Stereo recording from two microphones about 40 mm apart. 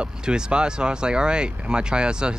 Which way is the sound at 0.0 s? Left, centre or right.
Right.